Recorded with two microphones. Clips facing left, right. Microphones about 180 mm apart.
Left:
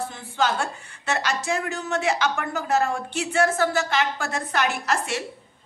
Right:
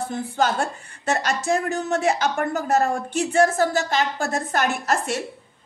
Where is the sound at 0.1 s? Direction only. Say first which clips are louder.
Right 5 dB; 40° right (ahead or behind).